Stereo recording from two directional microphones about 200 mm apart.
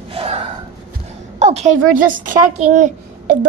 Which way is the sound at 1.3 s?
35° right (ahead or behind).